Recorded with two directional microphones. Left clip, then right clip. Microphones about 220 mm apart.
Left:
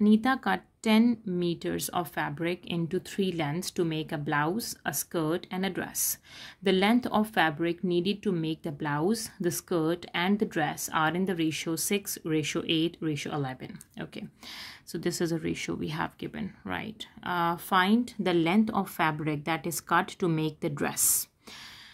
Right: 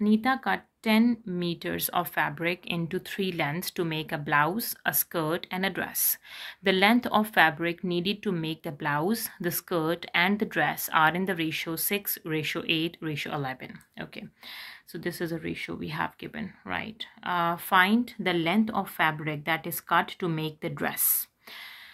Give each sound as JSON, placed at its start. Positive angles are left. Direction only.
{"t": 0.0, "sound": "speech", "side_deg": 35}